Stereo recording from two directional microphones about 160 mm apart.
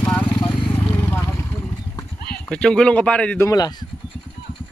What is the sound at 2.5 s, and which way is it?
Speech, 5° left (ahead or behind).